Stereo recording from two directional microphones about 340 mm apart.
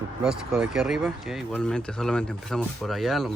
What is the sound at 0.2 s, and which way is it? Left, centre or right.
Speech, centre.